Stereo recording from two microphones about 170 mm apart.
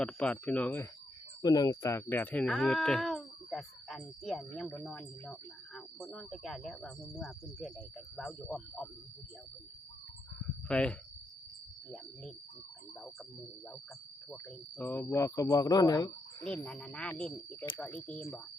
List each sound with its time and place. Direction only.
0.0 s speech: 5° left (ahead or behind)
1.4 s speech: 25° left (ahead or behind); by 8.9 s centre (ahead or behind)
10.7 s speech: 5° left (ahead or behind)
14.8 s speech: 10° left (ahead or behind)
16.6 s speech: 5° left (ahead or behind)